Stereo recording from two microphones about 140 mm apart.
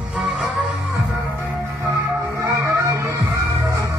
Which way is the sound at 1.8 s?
20° right (ahead or behind).